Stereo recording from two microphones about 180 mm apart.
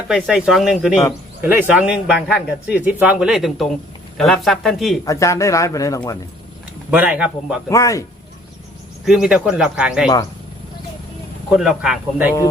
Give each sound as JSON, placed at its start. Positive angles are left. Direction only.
{"t": 0.1, "sound": "a man's voice", "side_deg": -5}
{"t": 5.0, "sound": "speech", "side_deg": 15}
{"t": 6.9, "sound": "speech", "side_deg": -10}
{"t": 7.7, "sound": "speech", "side_deg": 20}
{"t": 9.0, "sound": "a man's voice", "side_deg": -5}
{"t": 11.4, "sound": "a man's voice", "side_deg": -5}